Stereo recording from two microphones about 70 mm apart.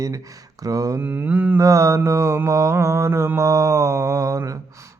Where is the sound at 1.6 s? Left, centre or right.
Right.